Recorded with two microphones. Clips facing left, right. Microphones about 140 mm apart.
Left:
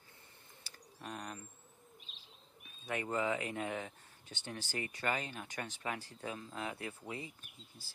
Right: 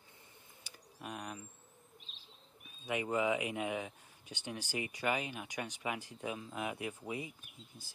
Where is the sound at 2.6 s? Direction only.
10° right (ahead or behind).